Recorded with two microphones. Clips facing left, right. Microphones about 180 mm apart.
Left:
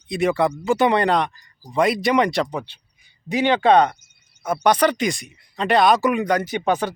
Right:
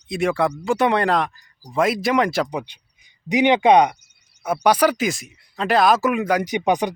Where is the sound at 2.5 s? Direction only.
15° right (ahead or behind).